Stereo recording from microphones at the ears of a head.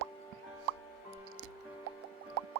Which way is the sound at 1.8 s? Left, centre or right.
Right.